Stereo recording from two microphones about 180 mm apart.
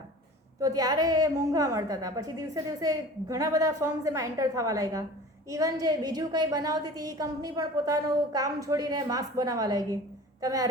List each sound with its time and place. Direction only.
0.6 s a woman's voice: 20° right (ahead or behind)